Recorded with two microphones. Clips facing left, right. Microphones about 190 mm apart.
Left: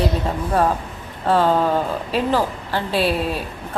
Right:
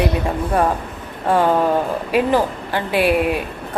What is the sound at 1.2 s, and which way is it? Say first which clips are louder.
A woman's voice: right 1 dB; 15° right (ahead or behind).